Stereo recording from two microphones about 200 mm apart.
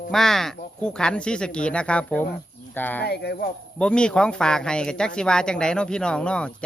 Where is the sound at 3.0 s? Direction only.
55° left (ahead or behind).